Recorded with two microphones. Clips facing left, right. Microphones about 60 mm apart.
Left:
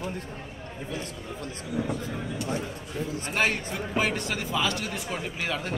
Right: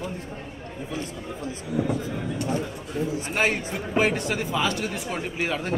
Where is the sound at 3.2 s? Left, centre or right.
Centre.